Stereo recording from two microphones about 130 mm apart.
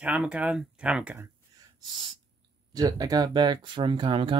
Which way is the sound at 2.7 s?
30° right (ahead or behind).